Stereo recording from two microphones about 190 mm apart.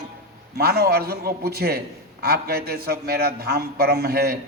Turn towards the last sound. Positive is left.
turn(degrees=-55)  # may be behind; listen again after turning